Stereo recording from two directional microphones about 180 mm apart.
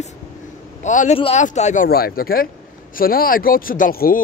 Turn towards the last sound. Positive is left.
turn(degrees=55)  # may be behind; listen again after turning